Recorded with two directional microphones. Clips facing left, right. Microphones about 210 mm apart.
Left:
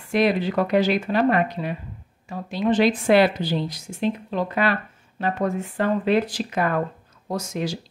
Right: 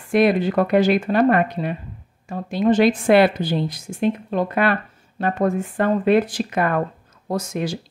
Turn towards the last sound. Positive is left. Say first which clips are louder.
# right 3 dB
turn(degrees=-55)  # may be behind; listen again after turning